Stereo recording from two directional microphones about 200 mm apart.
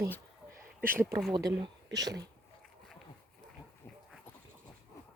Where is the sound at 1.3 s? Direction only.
20° right (ahead or behind).